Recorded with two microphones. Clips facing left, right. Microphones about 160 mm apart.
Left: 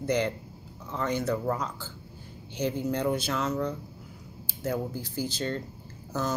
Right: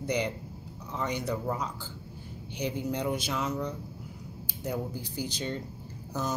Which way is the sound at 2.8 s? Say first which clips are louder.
Left 3 dB; 10° right (ahead or behind).